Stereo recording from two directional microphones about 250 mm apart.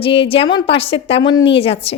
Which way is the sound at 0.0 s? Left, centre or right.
Left.